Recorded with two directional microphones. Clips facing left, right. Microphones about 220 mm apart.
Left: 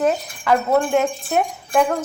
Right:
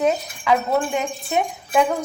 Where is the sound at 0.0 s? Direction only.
Centre (ahead or behind).